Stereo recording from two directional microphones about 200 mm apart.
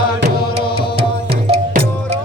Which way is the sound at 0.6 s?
25° left (ahead or behind).